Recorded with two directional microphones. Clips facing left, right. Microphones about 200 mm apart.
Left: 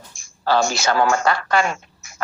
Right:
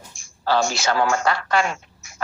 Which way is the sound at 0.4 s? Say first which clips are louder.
Left 2 dB; 45° left (ahead or behind).